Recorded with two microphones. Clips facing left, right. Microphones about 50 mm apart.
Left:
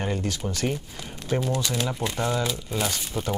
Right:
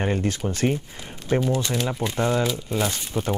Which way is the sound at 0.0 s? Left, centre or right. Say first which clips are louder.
Right 4 dB; right.